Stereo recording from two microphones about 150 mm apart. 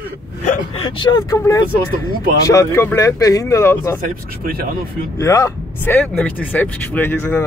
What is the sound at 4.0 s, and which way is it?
Speech, 85° right.